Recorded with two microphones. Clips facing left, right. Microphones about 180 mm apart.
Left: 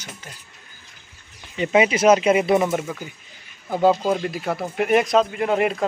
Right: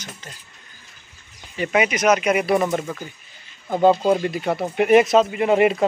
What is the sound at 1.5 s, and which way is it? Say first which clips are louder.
Speech: left 2 dB; 25° left (ahead or behind).